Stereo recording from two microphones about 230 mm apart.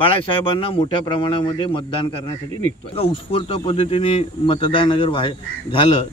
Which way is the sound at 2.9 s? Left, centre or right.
Left.